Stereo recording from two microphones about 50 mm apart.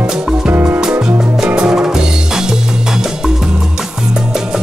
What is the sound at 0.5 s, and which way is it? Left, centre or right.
Music, right.